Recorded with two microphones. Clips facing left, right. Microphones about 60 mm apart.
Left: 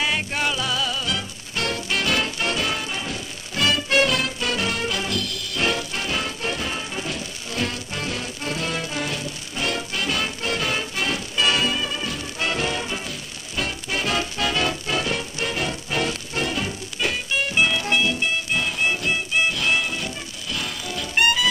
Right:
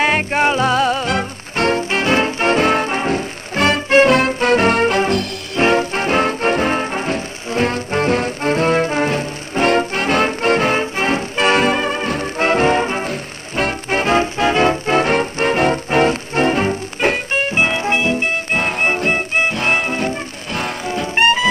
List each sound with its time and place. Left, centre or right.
0.0 s music: right